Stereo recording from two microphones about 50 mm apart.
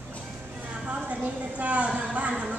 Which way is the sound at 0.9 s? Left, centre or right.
Right.